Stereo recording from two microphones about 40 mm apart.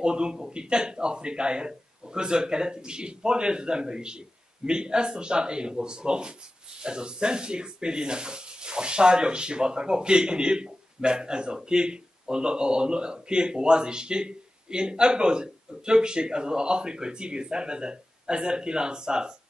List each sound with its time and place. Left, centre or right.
0.0 s a man's voice: right